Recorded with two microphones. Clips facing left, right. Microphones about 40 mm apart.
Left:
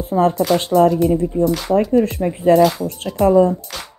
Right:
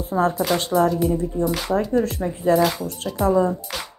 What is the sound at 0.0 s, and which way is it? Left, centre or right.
Speech, left.